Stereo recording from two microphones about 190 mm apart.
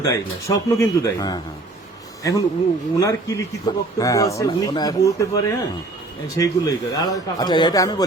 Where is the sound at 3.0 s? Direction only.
15° left (ahead or behind).